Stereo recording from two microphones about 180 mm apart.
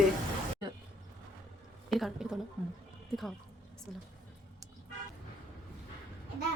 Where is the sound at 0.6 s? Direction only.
25° right (ahead or behind).